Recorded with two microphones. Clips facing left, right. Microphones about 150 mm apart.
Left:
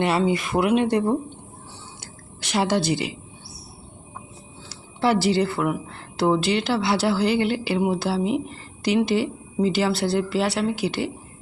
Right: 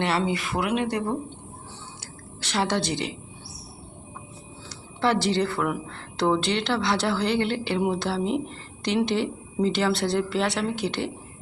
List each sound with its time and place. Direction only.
0.0 s speech: 15° left (ahead or behind)
4.7 s speech: 5° left (ahead or behind)